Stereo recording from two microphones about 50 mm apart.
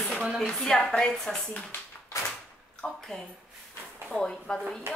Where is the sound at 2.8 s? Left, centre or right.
Left.